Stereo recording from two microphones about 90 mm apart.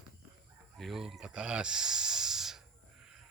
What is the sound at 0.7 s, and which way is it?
Snake, centre (ahead or behind).